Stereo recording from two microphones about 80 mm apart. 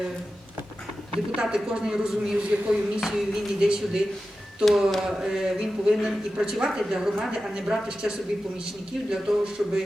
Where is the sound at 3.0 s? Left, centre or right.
Centre.